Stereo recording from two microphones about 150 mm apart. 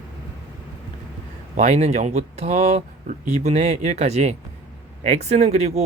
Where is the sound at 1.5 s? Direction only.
50° right (ahead or behind).